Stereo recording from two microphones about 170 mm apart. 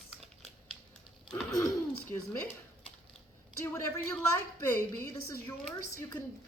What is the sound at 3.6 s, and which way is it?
A woman's voice, 15° left (ahead or behind).